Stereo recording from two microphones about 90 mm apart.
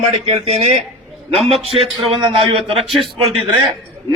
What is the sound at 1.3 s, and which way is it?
Speech, 90° right.